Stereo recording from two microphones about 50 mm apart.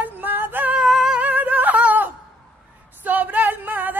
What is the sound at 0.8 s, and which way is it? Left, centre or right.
Singing, centre.